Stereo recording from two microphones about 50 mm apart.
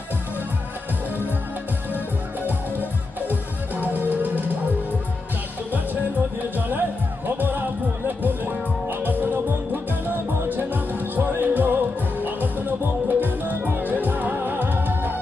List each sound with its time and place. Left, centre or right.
2.4 s music: right
7.3 s music: right